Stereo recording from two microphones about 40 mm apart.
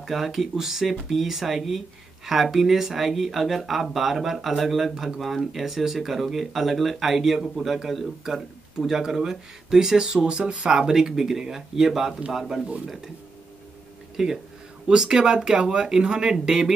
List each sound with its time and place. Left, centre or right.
0.0 s speech: centre; by 10.7 s right
10.7 s speech: centre
14.1 s speech: centre